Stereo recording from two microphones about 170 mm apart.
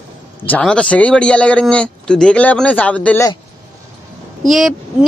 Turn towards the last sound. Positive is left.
turn(degrees=0)  # may be behind; listen again after turning